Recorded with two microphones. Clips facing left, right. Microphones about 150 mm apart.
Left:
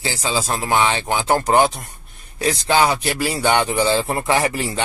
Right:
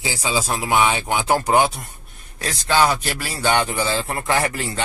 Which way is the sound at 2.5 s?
15° left (ahead or behind).